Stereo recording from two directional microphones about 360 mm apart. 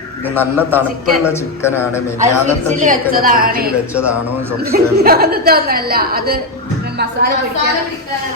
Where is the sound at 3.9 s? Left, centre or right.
Centre.